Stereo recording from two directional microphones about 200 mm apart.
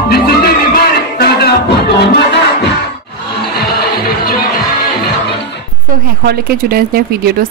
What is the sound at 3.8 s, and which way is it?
Music, 50° left (ahead or behind).